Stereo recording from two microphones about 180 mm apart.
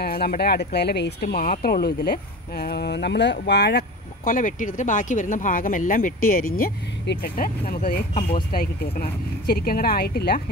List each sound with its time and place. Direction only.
0.0 s speech: 60° left (ahead or behind)
8.2 s speech: 30° left (ahead or behind)
8.9 s speech: 55° left (ahead or behind)